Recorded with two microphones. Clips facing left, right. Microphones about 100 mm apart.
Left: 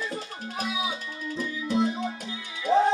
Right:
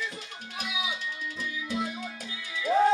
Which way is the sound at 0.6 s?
35° left (ahead or behind).